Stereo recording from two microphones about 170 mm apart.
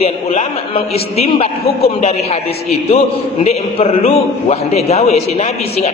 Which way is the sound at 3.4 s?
35° left (ahead or behind).